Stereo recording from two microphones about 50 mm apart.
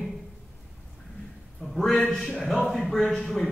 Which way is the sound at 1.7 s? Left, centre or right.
Centre.